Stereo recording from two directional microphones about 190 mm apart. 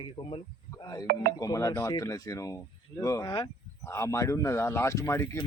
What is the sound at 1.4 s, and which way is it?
Speech, 15° left (ahead or behind).